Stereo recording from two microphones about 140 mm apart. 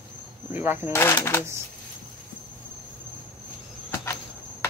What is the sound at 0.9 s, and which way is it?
Speech, 15° left (ahead or behind).